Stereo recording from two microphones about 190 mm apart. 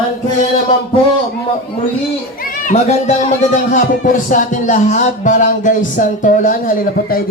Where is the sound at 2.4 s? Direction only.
40° left (ahead or behind).